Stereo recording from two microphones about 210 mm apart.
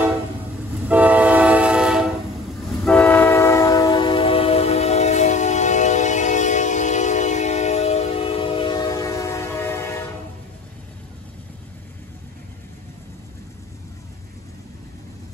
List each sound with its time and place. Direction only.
0.8 s train: 5° right (ahead or behind); by 10.0 s 10° left (ahead or behind)